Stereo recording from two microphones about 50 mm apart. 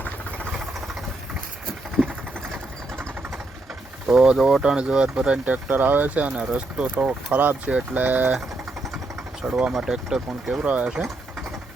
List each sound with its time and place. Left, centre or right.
2.0 s sewing machine: centre
4.0 s speech: centre
5.5 s speech: right
9.4 s speech: centre
10.7 s speech: right